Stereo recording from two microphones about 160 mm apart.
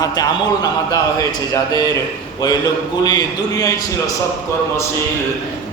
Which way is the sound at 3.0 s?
25° left (ahead or behind).